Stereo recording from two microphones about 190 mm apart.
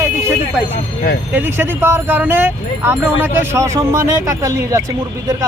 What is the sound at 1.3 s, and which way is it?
Speech, 10° right (ahead or behind).